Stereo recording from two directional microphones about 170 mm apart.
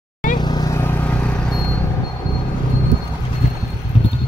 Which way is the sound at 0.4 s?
25° left (ahead or behind).